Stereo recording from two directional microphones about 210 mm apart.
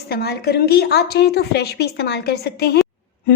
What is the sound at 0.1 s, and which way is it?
A woman's voice, 50° left (ahead or behind).